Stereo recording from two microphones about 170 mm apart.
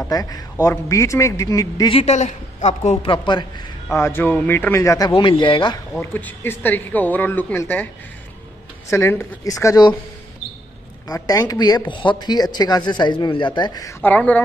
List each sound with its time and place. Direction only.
0.1 s speech: 20° left (ahead or behind)
2.0 s a woman's voice: 40° left (ahead or behind)
3.9 s speech: 15° left (ahead or behind)
5.1 s speech: 30° left (ahead or behind)
5.9 s speech: 10° left (ahead or behind)
8.9 s speech: 15° left (ahead or behind)
11.1 s speech: 20° left (ahead or behind)
14.0 s speech: 10° left (ahead or behind)